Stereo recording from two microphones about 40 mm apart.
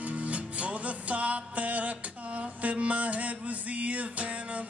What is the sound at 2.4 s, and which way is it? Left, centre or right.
Mantra, right.